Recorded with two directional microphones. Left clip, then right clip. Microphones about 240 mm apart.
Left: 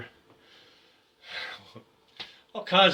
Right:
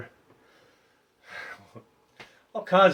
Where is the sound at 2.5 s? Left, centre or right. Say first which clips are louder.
Right 2 dB; right.